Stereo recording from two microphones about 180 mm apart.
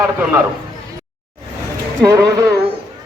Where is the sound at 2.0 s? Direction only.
15° right (ahead or behind).